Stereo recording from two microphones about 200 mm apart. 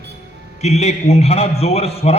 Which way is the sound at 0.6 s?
35° left (ahead or behind).